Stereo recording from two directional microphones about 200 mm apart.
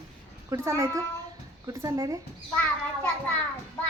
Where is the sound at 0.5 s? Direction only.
15° right (ahead or behind).